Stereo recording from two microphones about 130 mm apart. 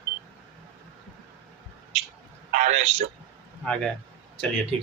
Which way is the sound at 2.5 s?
65° right (ahead or behind).